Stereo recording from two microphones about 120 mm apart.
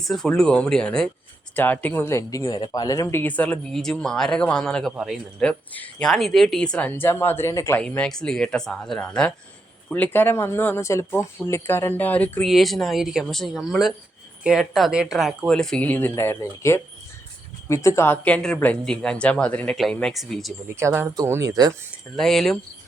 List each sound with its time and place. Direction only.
0.0 s speech: centre (ahead or behind)
5.5 s speech: 10° left (ahead or behind)
7.8 s speech: 10° left (ahead or behind)
12.5 s speech: centre (ahead or behind); by 16.8 s 25° left (ahead or behind)
17.8 s speech: 20° left (ahead or behind); by 20.5 s centre (ahead or behind)
20.7 s speech: 20° right (ahead or behind)
22.1 s speech: 5° left (ahead or behind)